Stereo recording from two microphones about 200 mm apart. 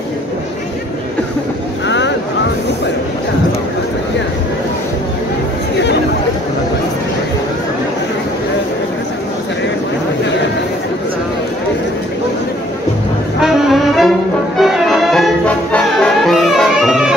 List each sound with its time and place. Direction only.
1.9 s vehicle: 65° left (ahead or behind)
13.4 s brass instrument: centre (ahead or behind)